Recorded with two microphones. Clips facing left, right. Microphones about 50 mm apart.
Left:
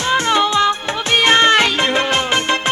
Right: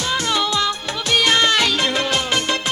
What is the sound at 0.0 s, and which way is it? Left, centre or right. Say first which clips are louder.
Music: left 5 dB; left.